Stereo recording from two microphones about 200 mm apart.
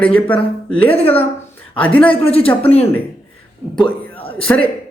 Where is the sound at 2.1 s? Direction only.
30° left (ahead or behind).